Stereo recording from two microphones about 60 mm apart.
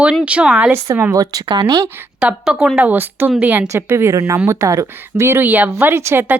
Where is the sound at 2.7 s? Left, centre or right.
Right.